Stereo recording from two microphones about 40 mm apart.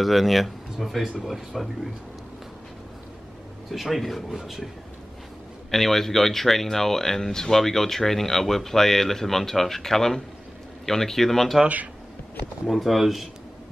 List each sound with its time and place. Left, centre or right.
0.0 s speech: centre
3.7 s speech: centre
5.7 s speech: centre
11.6 s speech: right
12.6 s speech: centre